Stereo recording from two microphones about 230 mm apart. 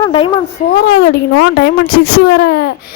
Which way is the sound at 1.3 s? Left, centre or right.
Left.